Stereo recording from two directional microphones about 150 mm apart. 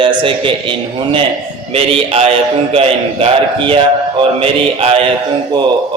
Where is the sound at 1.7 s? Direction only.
40° right (ahead or behind).